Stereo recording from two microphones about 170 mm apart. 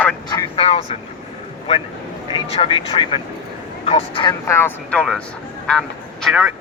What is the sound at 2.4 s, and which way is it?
Speech, 35° left (ahead or behind).